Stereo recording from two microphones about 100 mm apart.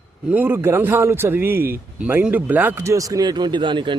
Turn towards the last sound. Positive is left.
turn(degrees=-55)  # may be behind; listen again after turning